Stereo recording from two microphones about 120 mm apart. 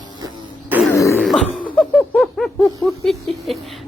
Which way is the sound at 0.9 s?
20° left (ahead or behind).